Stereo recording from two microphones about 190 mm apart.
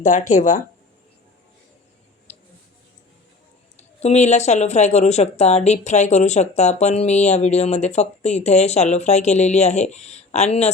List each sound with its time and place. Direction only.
0.0 s speech: 40° left (ahead or behind)
3.8 s speech: 35° left (ahead or behind)